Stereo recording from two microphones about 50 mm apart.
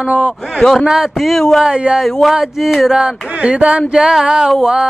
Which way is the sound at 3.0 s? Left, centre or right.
Right.